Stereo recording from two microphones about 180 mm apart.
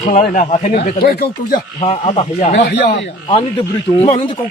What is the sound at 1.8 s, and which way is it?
Speech, 35° left (ahead or behind).